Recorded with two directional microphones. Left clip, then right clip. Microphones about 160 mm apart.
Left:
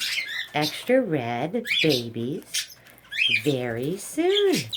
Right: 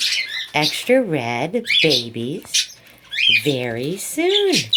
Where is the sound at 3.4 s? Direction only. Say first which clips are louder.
Right 4 dB; 25° right (ahead or behind).